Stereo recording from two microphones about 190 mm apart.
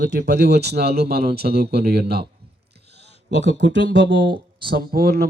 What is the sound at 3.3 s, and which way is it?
Speech, 65° right (ahead or behind).